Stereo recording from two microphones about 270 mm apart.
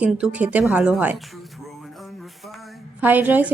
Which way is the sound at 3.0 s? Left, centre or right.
Centre.